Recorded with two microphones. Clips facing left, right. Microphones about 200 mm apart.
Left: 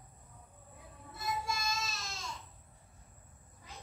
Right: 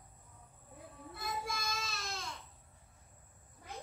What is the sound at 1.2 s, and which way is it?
Child singing, 60° right (ahead or behind).